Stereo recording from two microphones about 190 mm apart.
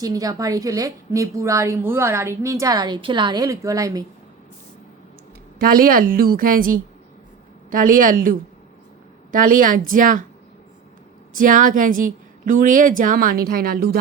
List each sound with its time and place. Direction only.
0.0 s a woman's voice: 20° right (ahead or behind)
5.5 s a woman's voice: 50° right (ahead or behind)
11.3 s a woman's voice: 45° right (ahead or behind)